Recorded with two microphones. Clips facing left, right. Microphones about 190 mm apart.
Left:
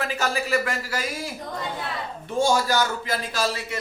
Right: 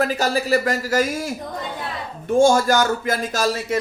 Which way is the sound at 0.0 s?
40° right (ahead or behind).